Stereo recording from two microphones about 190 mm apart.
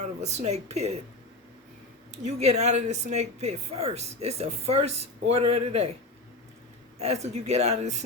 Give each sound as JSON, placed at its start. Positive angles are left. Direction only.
{"t": 0.0, "sound": "speech", "side_deg": -35}
{"t": 2.2, "sound": "speech", "side_deg": -35}
{"t": 7.0, "sound": "speech", "side_deg": -35}